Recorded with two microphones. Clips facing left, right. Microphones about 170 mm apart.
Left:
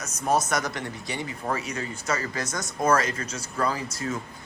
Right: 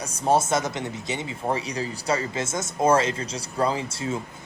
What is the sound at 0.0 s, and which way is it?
Speech, 30° right (ahead or behind).